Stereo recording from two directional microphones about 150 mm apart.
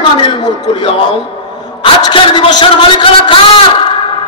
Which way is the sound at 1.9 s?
35° left (ahead or behind).